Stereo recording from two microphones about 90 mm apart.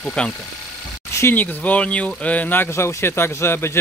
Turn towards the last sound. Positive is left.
turn(degrees=30)  # may be behind; listen again after turning